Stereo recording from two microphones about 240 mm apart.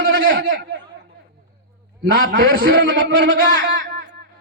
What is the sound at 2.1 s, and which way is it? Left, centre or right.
A man's voice, right.